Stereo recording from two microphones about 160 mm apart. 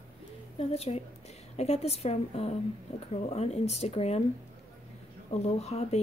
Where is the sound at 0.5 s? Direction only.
40° left (ahead or behind).